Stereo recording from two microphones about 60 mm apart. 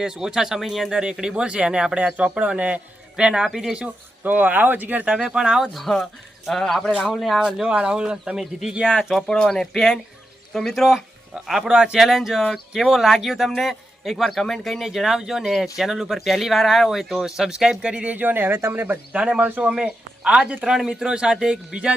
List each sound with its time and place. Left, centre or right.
0.0 s speech: centre
4.2 s speech: right
5.1 s speech: centre
5.7 s speech: centre
7.4 s speech: centre
9.0 s speech: centre; by 18.9 s right
19.1 s speech: right
20.7 s speech: centre